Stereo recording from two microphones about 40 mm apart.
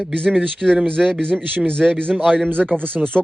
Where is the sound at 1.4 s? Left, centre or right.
Right.